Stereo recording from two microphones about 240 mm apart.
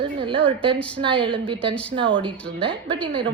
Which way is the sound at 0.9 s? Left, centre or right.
Right.